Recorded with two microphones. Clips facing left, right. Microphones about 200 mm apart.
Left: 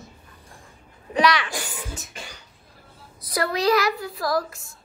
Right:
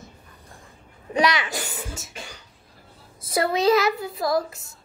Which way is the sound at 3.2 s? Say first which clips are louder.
Right 2 dB; 25° right (ahead or behind).